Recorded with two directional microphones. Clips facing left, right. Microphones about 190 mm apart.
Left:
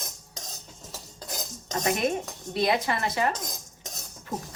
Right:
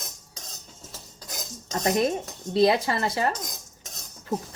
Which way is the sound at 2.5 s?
30° right (ahead or behind).